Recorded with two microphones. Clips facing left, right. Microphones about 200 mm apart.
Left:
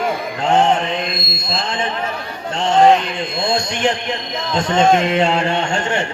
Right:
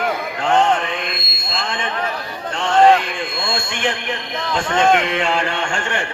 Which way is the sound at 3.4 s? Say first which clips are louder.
Left 6 dB; 40° left (ahead or behind).